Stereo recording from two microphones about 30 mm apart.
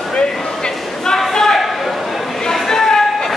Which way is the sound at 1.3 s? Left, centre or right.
Centre.